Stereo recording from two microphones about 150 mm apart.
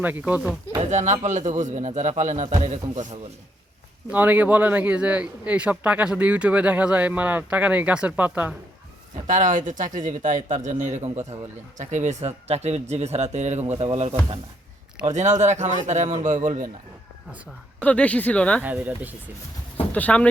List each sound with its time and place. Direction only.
0.0 s a man's voice: 10° right (ahead or behind)
0.8 s speech: 50° right (ahead or behind)
4.1 s a man's voice: 10° right (ahead or behind)
9.2 s speech: 55° right (ahead or behind)
17.8 s speech: 10° left (ahead or behind)
18.6 s a man's voice: 10° right (ahead or behind)
19.9 s speech: 10° left (ahead or behind)